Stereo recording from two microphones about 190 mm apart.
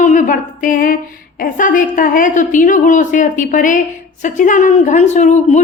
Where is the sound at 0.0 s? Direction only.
40° left (ahead or behind).